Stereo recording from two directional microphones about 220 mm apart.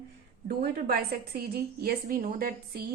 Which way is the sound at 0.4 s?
45° right (ahead or behind).